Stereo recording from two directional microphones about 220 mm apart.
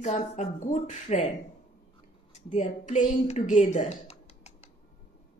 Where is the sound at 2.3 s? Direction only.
35° left (ahead or behind).